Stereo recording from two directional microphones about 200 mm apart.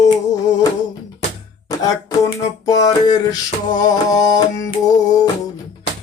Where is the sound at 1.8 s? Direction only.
20° left (ahead or behind).